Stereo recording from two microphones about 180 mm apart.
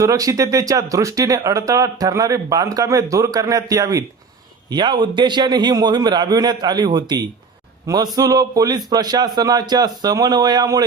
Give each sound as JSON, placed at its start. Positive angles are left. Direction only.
{"t": 0.0, "sound": "speech", "side_deg": -20}